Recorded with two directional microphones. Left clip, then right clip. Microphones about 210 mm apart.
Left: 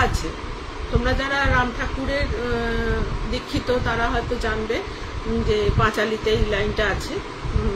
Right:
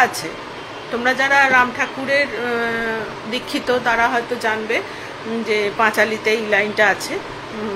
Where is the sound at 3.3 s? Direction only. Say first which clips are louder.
Right 4 dB; 15° left (ahead or behind).